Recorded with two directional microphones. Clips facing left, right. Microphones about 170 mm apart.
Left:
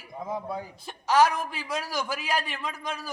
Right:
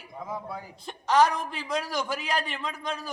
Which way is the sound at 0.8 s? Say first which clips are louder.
Even; 5° left (ahead or behind).